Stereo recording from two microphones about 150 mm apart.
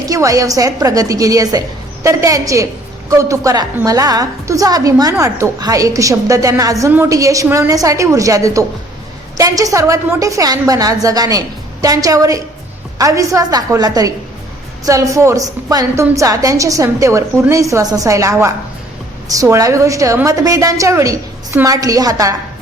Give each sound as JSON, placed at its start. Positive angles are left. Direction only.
{"t": 0.1, "sound": "a woman's voice", "side_deg": -20}